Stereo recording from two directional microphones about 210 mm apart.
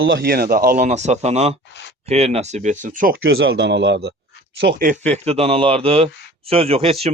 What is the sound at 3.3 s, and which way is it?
Speech, 55° right (ahead or behind).